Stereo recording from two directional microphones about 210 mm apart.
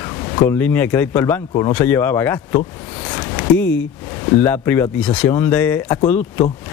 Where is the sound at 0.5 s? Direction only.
10° left (ahead or behind).